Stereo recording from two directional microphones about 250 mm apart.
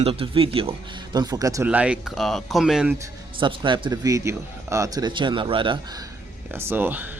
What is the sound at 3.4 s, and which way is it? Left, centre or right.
A man's voice, centre.